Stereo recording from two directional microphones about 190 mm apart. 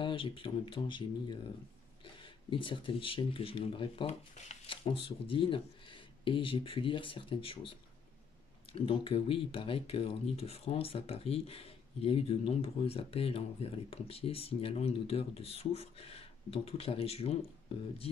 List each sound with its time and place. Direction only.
0.0 s speech: 25° left (ahead or behind)
8.7 s speech: 30° left (ahead or behind)